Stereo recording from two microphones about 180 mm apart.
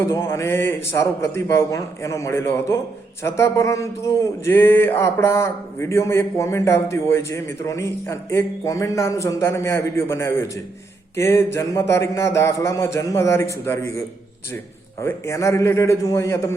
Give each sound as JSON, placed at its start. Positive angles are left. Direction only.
{"t": 0.0, "sound": "speech", "side_deg": 15}
{"t": 15.0, "sound": "speech", "side_deg": 15}